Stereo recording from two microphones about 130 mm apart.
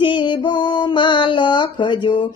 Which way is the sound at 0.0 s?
40° left (ahead or behind).